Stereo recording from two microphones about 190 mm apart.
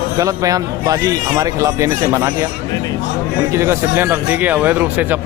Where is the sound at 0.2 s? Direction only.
20° right (ahead or behind).